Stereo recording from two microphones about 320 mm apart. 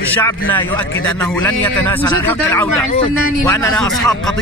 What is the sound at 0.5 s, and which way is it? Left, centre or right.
A man's voice, centre.